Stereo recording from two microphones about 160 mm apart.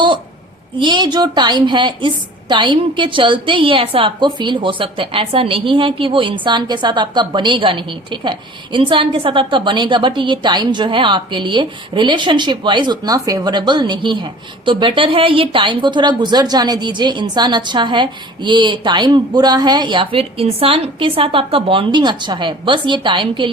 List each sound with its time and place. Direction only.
0.8 s a woman's voice: 30° right (ahead or behind)